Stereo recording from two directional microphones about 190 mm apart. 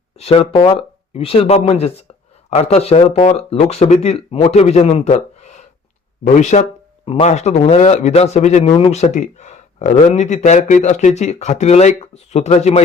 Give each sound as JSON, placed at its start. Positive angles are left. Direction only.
{"t": 0.2, "sound": "speech", "side_deg": 30}